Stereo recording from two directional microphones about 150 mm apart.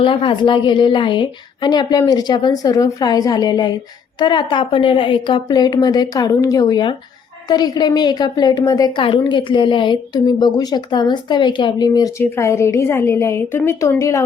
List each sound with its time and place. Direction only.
0.0 s a woman's voice: 35° left (ahead or behind)